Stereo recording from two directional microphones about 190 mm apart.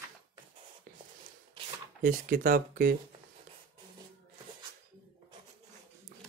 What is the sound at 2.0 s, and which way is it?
Speech, 45° right (ahead or behind).